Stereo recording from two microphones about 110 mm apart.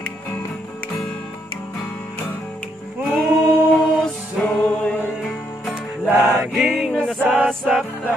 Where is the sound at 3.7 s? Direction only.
10° left (ahead or behind).